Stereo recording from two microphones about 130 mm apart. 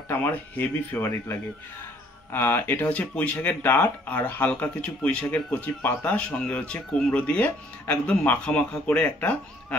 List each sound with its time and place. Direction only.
0.1 s speech: 15° left (ahead or behind)
1.0 s speech: 25° left (ahead or behind)